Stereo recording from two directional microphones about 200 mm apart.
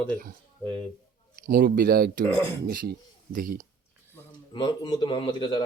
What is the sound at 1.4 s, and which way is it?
Speech, 45° right (ahead or behind).